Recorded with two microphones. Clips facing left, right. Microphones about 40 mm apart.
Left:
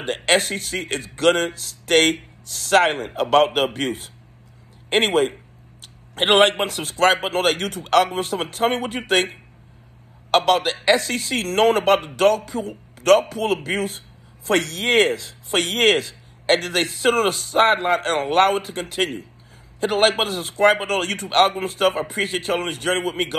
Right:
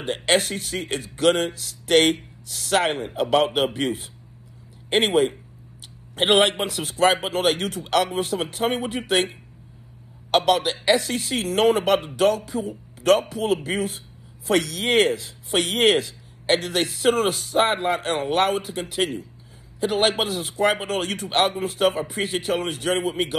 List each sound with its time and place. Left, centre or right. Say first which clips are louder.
0.0 s speech: left 2 dB; left